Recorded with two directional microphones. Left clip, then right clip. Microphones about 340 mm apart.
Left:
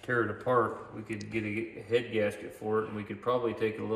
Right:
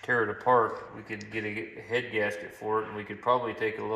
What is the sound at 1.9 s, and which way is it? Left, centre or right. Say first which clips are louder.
Speech: even; centre.